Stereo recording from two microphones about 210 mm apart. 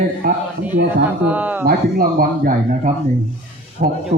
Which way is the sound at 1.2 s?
5° right (ahead or behind).